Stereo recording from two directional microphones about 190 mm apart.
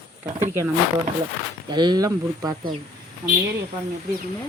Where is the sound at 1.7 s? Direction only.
25° right (ahead or behind).